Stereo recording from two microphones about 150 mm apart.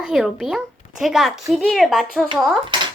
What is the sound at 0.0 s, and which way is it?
Speech, centre (ahead or behind).